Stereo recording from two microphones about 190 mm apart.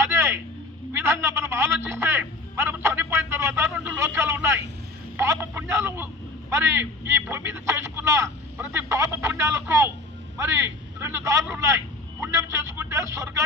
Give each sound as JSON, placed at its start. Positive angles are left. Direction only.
{"t": 0.0, "sound": "vehicle", "side_deg": -15}
{"t": 0.9, "sound": "music", "side_deg": -15}
{"t": 5.1, "sound": "a sound", "side_deg": -15}
{"t": 6.5, "sound": "speech", "side_deg": -15}